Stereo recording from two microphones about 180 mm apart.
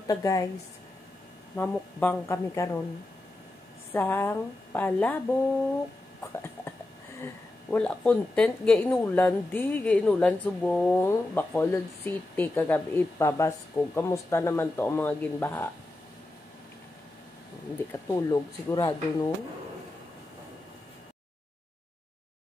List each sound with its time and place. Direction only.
0.0 s a woman's voice: 20° left (ahead or behind)
1.6 s speech: 10° left (ahead or behind)
3.9 s speech: 10° left (ahead or behind)
6.2 s a sound: 15° left (ahead or behind)
7.7 s speech: 5° left (ahead or behind)
18.0 s speech: 20° left (ahead or behind)